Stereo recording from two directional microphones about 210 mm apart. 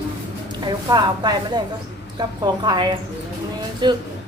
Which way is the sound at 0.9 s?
20° right (ahead or behind).